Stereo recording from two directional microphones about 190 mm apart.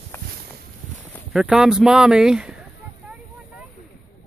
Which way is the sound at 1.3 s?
5° right (ahead or behind).